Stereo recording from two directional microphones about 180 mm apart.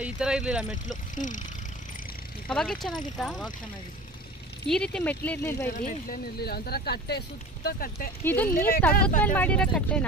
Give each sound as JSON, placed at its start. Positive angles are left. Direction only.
{"t": 0.0, "sound": "speech", "side_deg": -5}
{"t": 1.1, "sound": "speech", "side_deg": 45}
{"t": 2.4, "sound": "speech", "side_deg": 5}
{"t": 4.6, "sound": "speech", "side_deg": 5}
{"t": 5.7, "sound": "speech", "side_deg": 55}
{"t": 8.2, "sound": "speech", "side_deg": 10}
{"t": 8.5, "sound": "speech", "side_deg": 55}
{"t": 9.2, "sound": "speech", "side_deg": 10}